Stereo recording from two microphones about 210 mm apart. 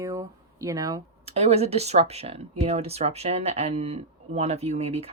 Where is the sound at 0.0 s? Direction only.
15° right (ahead or behind).